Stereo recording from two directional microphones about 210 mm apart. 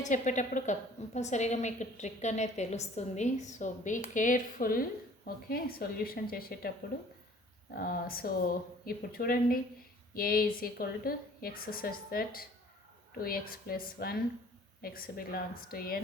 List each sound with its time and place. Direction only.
0.0 s a woman's voice: 35° left (ahead or behind)
7.8 s a woman's voice: 45° left (ahead or behind)